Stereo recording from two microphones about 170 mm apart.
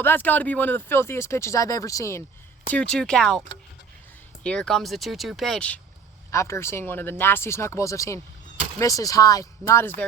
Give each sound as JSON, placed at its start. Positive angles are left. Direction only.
{"t": 0.0, "sound": "speech", "side_deg": 10}
{"t": 2.6, "sound": "speech", "side_deg": 5}
{"t": 4.4, "sound": "speech", "side_deg": 5}
{"t": 6.3, "sound": "speech", "side_deg": 15}